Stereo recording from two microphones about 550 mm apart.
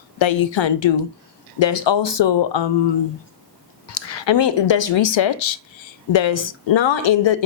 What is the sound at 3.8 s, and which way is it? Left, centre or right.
Speech, left.